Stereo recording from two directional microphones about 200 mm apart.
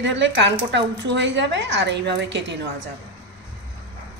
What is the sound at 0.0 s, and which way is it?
Speech, 65° right (ahead or behind).